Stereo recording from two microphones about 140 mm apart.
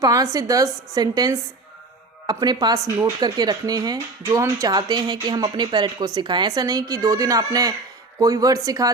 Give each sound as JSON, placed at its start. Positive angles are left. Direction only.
{"t": 0.0, "sound": "speech", "side_deg": -25}